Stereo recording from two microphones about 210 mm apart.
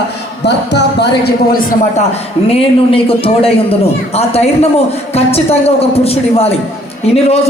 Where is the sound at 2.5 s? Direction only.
25° left (ahead or behind).